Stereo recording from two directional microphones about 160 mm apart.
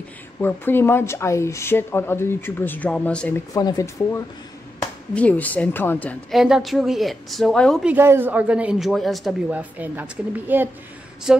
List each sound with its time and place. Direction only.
0.4 s speech: 15° left (ahead or behind)
3.5 s speech: 20° left (ahead or behind)
5.1 s speech: 10° left (ahead or behind)
6.3 s a woman's voice: centre (ahead or behind)
7.8 s speech: 15° right (ahead or behind)
9.5 s a woman's voice: 10° right (ahead or behind)